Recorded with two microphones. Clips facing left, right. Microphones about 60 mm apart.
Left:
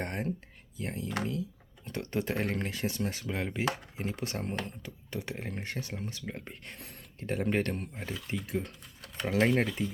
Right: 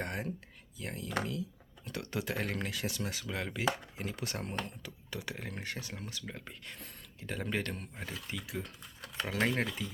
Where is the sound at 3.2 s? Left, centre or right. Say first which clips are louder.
Even; centre; by 6.7 s left.